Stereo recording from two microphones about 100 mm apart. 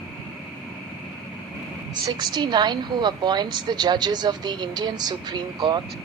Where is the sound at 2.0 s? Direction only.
45° right (ahead or behind).